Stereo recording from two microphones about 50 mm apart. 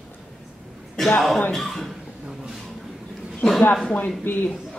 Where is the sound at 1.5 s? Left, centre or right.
Centre.